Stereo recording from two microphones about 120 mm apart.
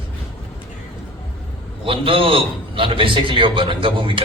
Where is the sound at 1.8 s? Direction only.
45° right (ahead or behind).